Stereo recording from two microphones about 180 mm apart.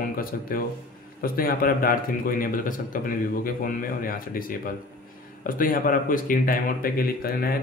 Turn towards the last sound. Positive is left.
turn(degrees=55)  # may be behind; listen again after turning